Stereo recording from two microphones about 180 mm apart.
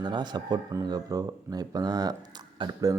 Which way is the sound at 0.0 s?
25° right (ahead or behind).